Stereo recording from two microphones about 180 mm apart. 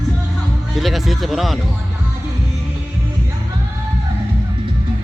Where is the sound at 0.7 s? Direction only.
Centre (ahead or behind).